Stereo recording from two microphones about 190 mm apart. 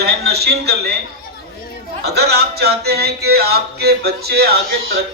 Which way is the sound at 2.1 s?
55° right (ahead or behind).